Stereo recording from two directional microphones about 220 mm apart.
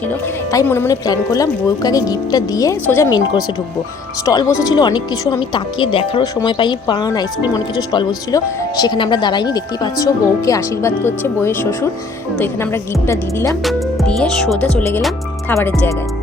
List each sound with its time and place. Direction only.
0.1 s speech: 10° left (ahead or behind)